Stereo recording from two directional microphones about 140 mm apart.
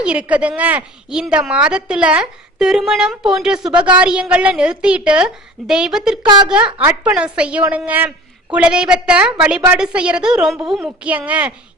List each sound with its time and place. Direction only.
0.0 s a woman's voice: 10° right (ahead or behind)
3.7 s a woman's voice: 35° right (ahead or behind)
3.9 s a woman's voice: 5° right (ahead or behind)
6.2 s a woman's voice: 30° right (ahead or behind)
6.7 s a woman's voice: 10° right (ahead or behind)